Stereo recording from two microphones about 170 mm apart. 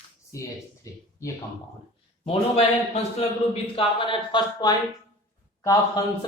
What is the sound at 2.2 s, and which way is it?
Speech, 35° left (ahead or behind).